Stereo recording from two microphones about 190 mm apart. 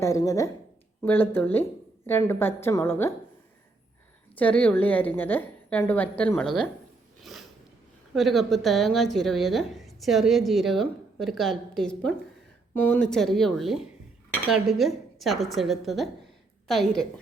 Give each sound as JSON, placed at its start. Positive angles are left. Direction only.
{"t": 0.0, "sound": "a woman's voice", "side_deg": 15}
{"t": 4.4, "sound": "a woman's voice", "side_deg": 10}
{"t": 7.2, "sound": "a sound", "side_deg": 0}
{"t": 8.1, "sound": "a woman's voice", "side_deg": 0}